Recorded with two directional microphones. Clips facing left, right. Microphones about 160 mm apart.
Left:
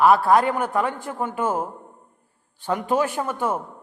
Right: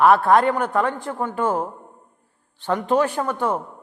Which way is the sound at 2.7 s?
10° left (ahead or behind).